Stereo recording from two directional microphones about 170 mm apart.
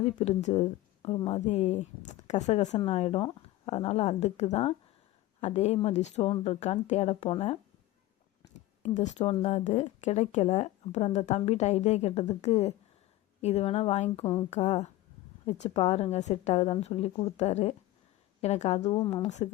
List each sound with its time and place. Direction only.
0.0 s speech: 40° left (ahead or behind)
8.8 s speech: 45° left (ahead or behind)